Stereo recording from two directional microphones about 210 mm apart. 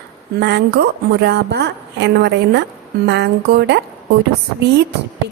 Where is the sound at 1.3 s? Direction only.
55° right (ahead or behind).